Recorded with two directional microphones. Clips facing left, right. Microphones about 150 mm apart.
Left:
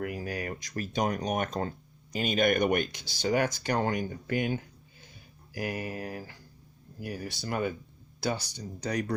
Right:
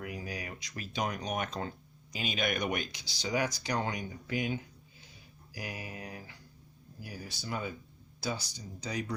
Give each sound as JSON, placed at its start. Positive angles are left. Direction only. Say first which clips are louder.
{"t": 0.0, "sound": "speech", "louder": "left 6 dB", "side_deg": 55}
{"t": 7.0, "sound": "speech", "louder": "left 7 dB", "side_deg": 65}